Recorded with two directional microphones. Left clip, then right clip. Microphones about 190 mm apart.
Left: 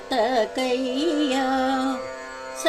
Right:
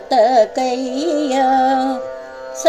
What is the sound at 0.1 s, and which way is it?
Music, 15° left (ahead or behind).